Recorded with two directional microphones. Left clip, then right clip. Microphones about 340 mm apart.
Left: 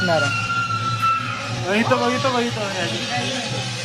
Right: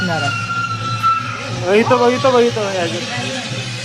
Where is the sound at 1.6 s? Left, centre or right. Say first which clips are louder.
Right 7 dB; centre.